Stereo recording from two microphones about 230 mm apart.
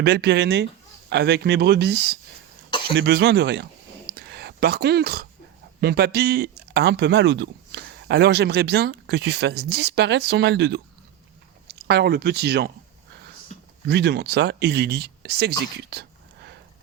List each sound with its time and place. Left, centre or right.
0.0 s speech: right
2.6 s cough: left
2.9 s speech: right
4.1 s a sound: right
5.8 s speech: right
11.9 s speech: right
13.5 s a sound: left
13.8 s speech: right